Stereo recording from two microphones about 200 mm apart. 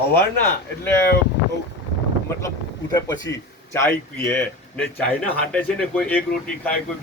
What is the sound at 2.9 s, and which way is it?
Speech, 20° left (ahead or behind).